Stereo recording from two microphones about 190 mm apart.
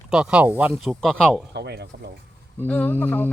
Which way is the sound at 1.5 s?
60° right (ahead or behind).